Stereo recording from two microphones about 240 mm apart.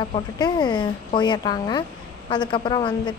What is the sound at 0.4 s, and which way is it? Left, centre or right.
A woman's voice, centre.